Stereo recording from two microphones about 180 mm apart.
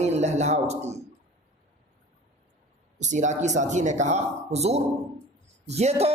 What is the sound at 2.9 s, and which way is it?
A woman's voice, 40° right (ahead or behind).